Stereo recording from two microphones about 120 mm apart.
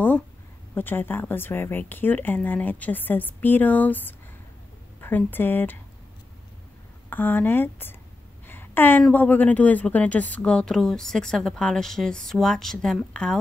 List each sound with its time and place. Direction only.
0.7 s a woman's voice: 15° left (ahead or behind)
7.1 s a woman's voice: 15° left (ahead or behind)
8.5 s a sound: 15° left (ahead or behind)
9.1 s a woman's voice: 15° left (ahead or behind)